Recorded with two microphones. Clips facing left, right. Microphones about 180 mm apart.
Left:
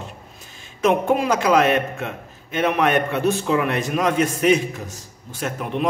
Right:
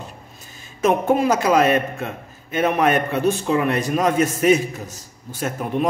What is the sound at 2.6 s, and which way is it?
A man's voice, 40° right (ahead or behind).